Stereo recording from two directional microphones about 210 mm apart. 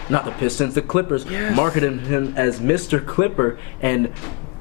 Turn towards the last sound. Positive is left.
turn(degrees=15)  # may be behind; listen again after turning